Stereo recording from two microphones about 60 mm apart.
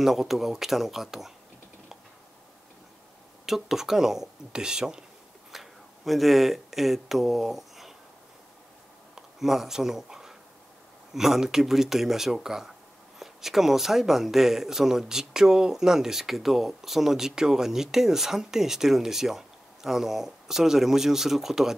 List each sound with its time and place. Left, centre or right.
0.0 s speech: centre
3.4 s speech: centre
5.5 s speech: centre
9.4 s speech: centre